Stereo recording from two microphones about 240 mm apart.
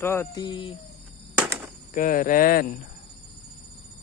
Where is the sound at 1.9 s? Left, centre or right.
Left.